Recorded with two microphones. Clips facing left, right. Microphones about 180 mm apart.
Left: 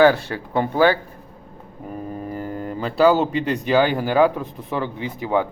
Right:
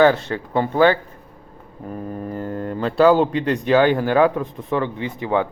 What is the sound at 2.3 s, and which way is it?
Speech, 10° left (ahead or behind).